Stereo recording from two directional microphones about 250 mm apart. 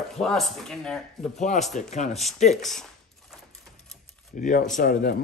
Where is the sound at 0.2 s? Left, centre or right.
Centre.